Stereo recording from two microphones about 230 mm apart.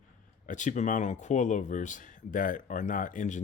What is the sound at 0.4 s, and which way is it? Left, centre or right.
Speech, left.